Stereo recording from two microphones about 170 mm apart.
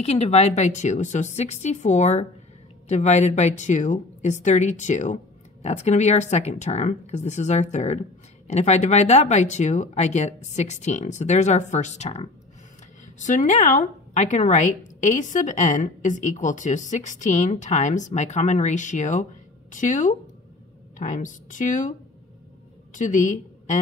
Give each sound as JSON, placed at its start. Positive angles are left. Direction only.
{"t": 0.0, "sound": "a woman's voice", "side_deg": 40}
{"t": 22.9, "sound": "a woman's voice", "side_deg": 45}